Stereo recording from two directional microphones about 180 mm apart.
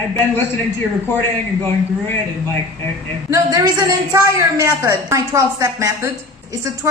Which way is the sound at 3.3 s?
20° right (ahead or behind).